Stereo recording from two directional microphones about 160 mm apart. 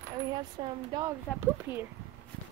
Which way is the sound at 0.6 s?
25° right (ahead or behind).